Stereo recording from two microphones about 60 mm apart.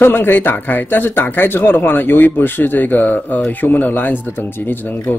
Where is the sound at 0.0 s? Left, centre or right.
Left.